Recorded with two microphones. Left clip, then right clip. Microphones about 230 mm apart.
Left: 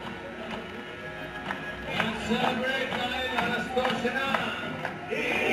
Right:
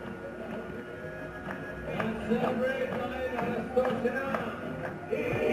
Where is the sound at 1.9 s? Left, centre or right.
Centre.